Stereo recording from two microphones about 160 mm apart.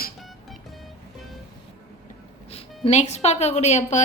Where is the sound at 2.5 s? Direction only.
45° left (ahead or behind).